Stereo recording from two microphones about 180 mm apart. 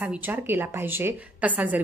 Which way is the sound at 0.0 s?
10° right (ahead or behind).